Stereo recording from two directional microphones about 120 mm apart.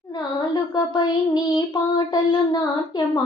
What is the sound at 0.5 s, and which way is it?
Child singing, 35° left (ahead or behind).